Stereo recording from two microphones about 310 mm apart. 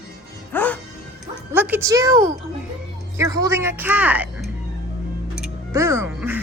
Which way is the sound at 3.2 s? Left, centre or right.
Centre.